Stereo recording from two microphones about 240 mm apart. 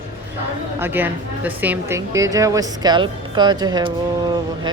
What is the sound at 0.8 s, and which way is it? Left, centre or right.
A woman's voice, centre.